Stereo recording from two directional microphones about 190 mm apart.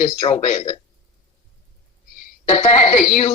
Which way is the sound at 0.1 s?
35° left (ahead or behind).